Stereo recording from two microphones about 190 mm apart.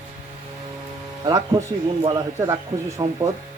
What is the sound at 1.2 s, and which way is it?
Speech, 20° right (ahead or behind).